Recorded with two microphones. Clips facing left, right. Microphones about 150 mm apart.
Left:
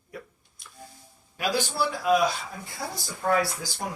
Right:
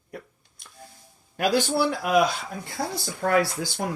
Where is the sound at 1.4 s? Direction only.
50° right (ahead or behind).